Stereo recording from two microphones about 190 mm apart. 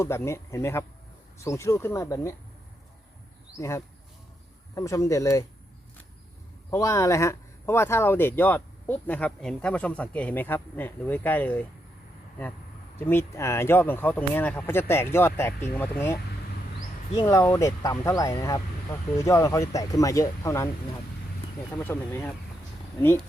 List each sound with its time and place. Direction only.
0.0 s speech: 15° left (ahead or behind)
3.6 s speech: 15° left (ahead or behind)
6.7 s speech: 15° left (ahead or behind)
13.0 s speech: 10° left (ahead or behind)
17.2 s speech: 15° left (ahead or behind)
21.8 s speech: 10° left (ahead or behind)